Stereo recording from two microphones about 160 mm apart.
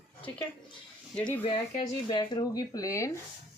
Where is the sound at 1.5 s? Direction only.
30° left (ahead or behind).